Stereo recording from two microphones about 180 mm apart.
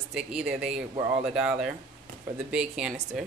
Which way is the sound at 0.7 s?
30° right (ahead or behind).